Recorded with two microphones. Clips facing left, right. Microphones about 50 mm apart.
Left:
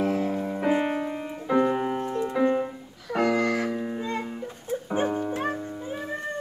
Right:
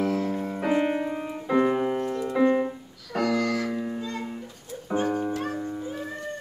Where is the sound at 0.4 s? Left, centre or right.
Centre.